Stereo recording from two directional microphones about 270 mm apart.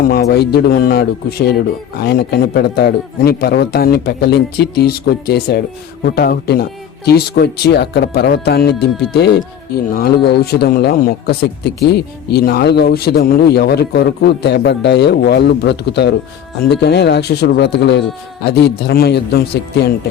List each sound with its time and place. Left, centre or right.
0.0 s speech: left